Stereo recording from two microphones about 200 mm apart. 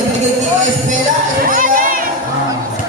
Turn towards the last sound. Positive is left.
turn(degrees=-45)  # may be behind; listen again after turning